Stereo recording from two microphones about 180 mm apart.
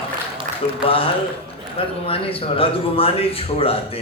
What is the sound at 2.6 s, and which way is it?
Speech, 30° left (ahead or behind).